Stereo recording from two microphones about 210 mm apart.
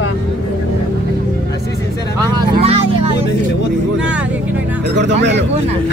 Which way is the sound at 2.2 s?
25° right (ahead or behind).